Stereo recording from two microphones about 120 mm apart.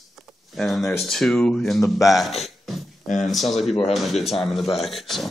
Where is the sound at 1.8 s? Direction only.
25° left (ahead or behind).